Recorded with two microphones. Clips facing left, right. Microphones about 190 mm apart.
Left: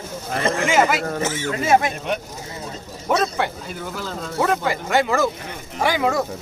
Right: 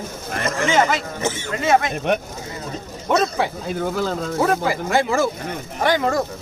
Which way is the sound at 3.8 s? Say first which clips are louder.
Right 7 dB; 50° right (ahead or behind).